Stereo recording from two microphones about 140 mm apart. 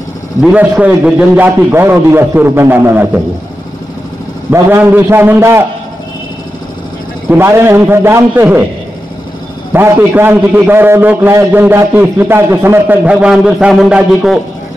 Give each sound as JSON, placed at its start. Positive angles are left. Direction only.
{"t": 0.4, "sound": "a man's voice", "side_deg": -10}
{"t": 4.5, "sound": "a man's voice", "side_deg": -15}
{"t": 7.2, "sound": "a man's voice", "side_deg": -20}
{"t": 9.7, "sound": "a man's voice", "side_deg": -15}